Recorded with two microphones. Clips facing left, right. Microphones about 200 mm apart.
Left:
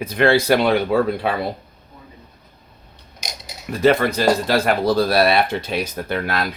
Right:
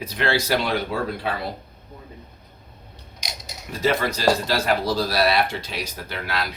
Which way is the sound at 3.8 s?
55° left (ahead or behind).